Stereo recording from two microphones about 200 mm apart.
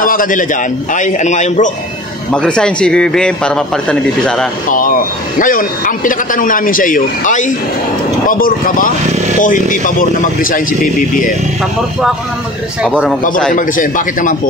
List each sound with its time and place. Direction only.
0.0 s a man's voice: 45° left (ahead or behind)
2.3 s a man's voice: 5° left (ahead or behind)
4.6 s a man's voice: 40° left (ahead or behind)
12.8 s a man's voice: centre (ahead or behind)
13.5 s a man's voice: 40° left (ahead or behind)